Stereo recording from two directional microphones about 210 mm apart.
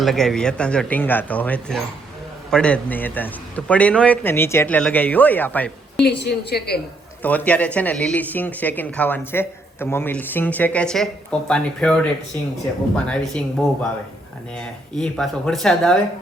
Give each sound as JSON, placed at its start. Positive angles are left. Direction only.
{"t": 0.0, "sound": "speech", "side_deg": 0}
{"t": 6.0, "sound": "a woman's voice", "side_deg": 50}
{"t": 7.2, "sound": "speech", "side_deg": 5}
{"t": 13.1, "sound": "speech", "side_deg": 5}